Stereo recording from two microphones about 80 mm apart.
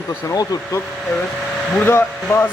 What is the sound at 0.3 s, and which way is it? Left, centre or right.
Speech, left.